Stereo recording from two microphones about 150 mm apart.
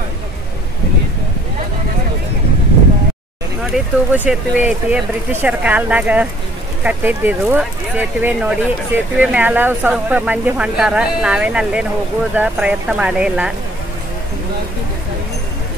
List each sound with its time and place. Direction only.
3.7 s speech: 5° right (ahead or behind)